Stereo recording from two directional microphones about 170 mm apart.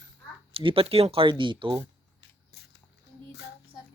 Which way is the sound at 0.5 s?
30° right (ahead or behind).